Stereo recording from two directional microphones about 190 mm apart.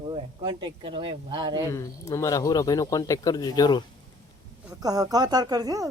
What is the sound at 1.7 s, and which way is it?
Speech, 15° left (ahead or behind).